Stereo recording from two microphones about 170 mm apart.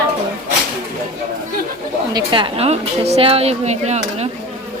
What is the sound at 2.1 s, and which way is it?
A woman's voice, 30° right (ahead or behind).